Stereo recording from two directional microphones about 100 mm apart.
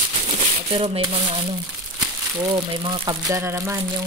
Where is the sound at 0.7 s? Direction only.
75° right (ahead or behind).